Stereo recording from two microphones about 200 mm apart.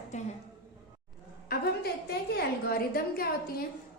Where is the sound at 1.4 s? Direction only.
50° left (ahead or behind).